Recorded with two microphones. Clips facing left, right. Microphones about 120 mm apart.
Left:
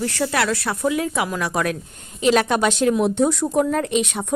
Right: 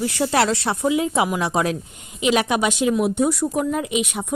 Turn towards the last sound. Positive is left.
turn(degrees=-10)  # may be behind; listen again after turning